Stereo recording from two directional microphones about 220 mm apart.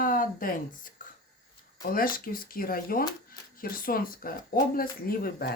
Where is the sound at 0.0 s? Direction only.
40° left (ahead or behind).